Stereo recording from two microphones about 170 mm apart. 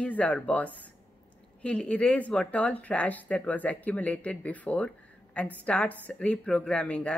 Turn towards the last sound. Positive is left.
turn(degrees=5)  # may be behind; listen again after turning